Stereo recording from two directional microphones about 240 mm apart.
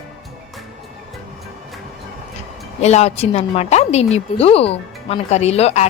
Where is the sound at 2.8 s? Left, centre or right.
Left.